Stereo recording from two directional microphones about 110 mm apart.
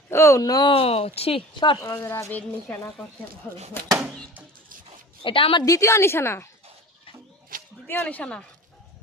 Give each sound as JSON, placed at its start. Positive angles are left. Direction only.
{"t": 0.1, "sound": "speech", "side_deg": 25}
{"t": 0.7, "sound": "speech", "side_deg": 60}
{"t": 1.5, "sound": "a woman's voice", "side_deg": 45}
{"t": 1.8, "sound": "a woman's voice", "side_deg": 30}
{"t": 3.8, "sound": "a woman's voice", "side_deg": 20}
{"t": 5.2, "sound": "a woman's voice", "side_deg": 55}
{"t": 5.6, "sound": "a woman's voice", "side_deg": 30}
{"t": 7.9, "sound": "speech", "side_deg": 15}